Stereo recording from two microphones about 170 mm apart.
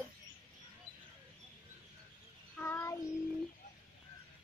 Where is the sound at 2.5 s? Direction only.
15° left (ahead or behind).